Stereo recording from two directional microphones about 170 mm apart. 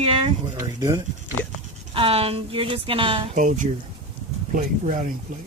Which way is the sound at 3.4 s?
50° right (ahead or behind).